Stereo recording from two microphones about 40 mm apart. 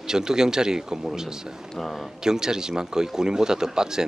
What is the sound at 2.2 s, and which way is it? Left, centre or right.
Speech, centre.